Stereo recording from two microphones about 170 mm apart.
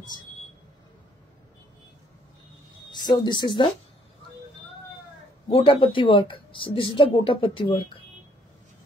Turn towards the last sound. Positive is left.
turn(degrees=30)  # may be behind; listen again after turning